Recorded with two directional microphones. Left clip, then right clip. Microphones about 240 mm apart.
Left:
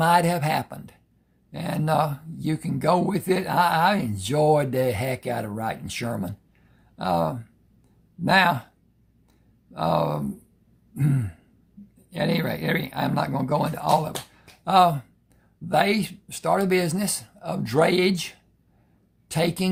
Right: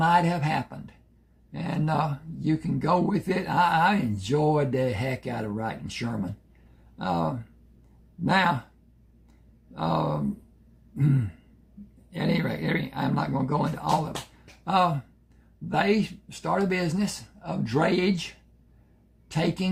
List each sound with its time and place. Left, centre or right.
0.0 s speech: left
9.7 s speech: left
19.3 s speech: left